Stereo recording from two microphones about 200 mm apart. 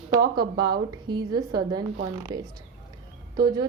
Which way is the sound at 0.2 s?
20° right (ahead or behind).